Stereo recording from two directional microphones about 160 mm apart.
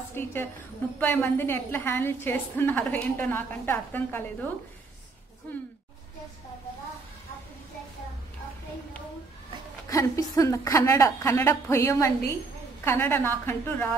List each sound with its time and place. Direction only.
0.1 s a woman's voice: 15° left (ahead or behind)
9.8 s a woman's voice: 20° left (ahead or behind)